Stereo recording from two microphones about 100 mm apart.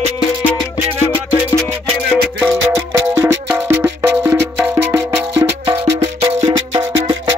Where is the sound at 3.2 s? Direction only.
20° right (ahead or behind).